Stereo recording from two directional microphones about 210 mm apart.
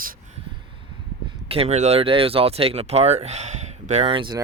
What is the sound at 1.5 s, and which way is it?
Speech, 30° right (ahead or behind).